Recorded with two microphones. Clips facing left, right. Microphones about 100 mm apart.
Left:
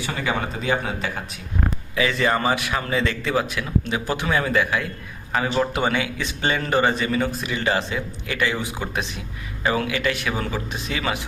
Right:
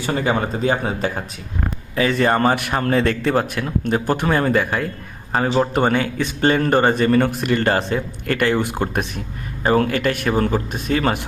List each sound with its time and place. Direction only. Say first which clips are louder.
0.0 s speech: right 5 dB; 40° right (ahead or behind)
5.7 s speech: right 5 dB; 45° right (ahead or behind)